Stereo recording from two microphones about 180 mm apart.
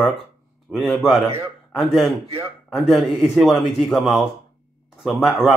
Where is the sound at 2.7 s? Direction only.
Centre (ahead or behind).